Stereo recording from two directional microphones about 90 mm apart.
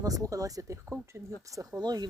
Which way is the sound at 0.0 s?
40° right (ahead or behind).